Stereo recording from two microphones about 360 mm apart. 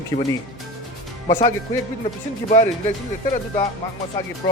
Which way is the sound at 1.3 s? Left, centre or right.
Centre.